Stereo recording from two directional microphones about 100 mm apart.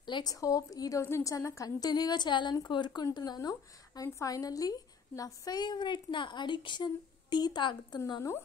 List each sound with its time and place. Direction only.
0.0 s a woman's voice: 45° left (ahead or behind)